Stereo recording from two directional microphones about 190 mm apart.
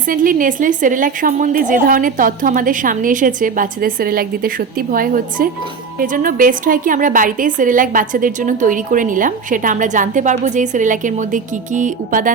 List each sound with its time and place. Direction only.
0.1 s a woman's voice: 45° right (ahead or behind)